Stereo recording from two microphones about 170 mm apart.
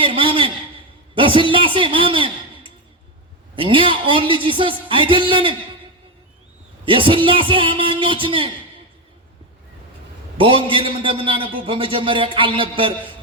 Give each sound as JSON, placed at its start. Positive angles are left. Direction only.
{"t": 0.0, "sound": "a sound", "side_deg": -30}
{"t": 1.1, "sound": "a man's voice", "side_deg": -30}
{"t": 6.8, "sound": "a man's voice", "side_deg": -30}
{"t": 10.3, "sound": "a man's voice", "side_deg": -30}